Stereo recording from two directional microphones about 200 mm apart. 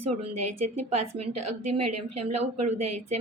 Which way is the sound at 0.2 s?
30° right (ahead or behind).